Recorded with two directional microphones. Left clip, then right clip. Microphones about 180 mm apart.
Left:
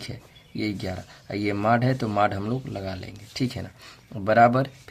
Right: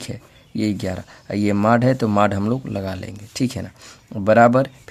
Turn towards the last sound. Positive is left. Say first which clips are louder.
# right 4 dB
turn(degrees=-30)  # may be behind; listen again after turning